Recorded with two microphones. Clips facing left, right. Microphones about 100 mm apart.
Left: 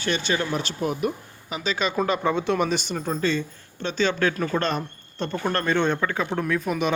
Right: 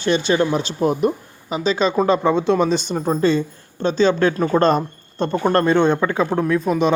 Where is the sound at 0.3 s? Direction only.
25° right (ahead or behind).